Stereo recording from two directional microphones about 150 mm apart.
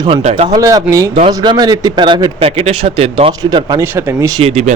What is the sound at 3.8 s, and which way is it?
Speech, 15° right (ahead or behind).